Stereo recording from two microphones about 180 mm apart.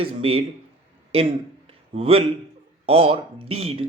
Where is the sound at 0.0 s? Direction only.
30° right (ahead or behind).